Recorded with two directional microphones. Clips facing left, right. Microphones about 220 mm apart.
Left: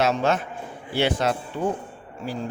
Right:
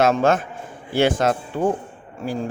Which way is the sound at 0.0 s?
50° right (ahead or behind).